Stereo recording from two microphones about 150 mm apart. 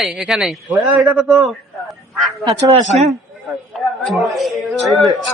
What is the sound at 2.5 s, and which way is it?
Speech, 20° right (ahead or behind).